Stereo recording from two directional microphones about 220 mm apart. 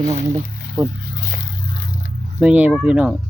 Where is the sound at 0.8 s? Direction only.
15° right (ahead or behind).